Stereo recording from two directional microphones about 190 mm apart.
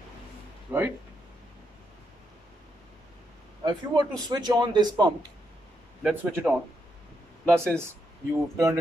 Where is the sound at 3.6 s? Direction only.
20° right (ahead or behind).